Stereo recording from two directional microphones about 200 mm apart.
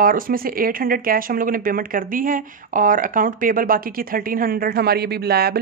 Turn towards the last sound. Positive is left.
turn(degrees=-50)  # may be behind; listen again after turning